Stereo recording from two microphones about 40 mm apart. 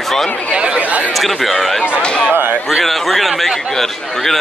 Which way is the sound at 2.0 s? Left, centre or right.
Left.